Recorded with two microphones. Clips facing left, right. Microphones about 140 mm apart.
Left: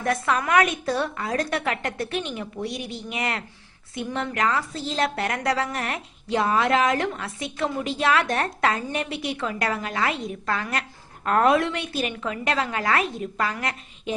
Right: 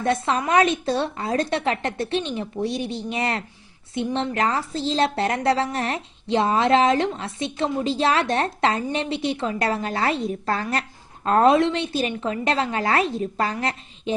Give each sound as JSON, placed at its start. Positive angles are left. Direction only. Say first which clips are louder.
{"t": 0.0, "sound": "a woman's voice", "louder": "right 2 dB", "side_deg": -25}